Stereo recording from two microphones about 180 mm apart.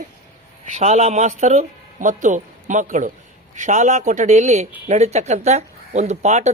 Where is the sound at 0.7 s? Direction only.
40° right (ahead or behind).